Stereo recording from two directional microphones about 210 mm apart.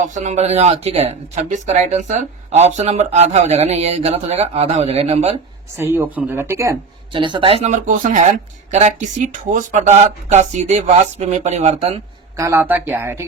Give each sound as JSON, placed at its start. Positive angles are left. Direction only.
{"t": 0.0, "sound": "speech", "side_deg": -35}
{"t": 5.7, "sound": "speech", "side_deg": -10}
{"t": 7.1, "sound": "speech", "side_deg": -25}
{"t": 12.4, "sound": "speech", "side_deg": -15}